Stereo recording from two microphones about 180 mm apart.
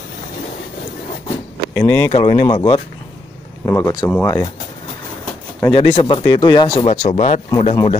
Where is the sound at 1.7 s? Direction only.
10° left (ahead or behind).